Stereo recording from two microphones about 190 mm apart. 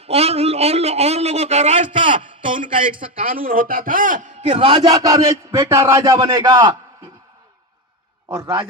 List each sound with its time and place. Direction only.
0.0 s a man's voice: 30° right (ahead or behind)
2.0 s a sound: 25° right (ahead or behind)
2.5 s a man's voice: 45° right (ahead or behind)
4.6 s a man's voice: 20° right (ahead or behind)
8.4 s a man's voice: 20° right (ahead or behind)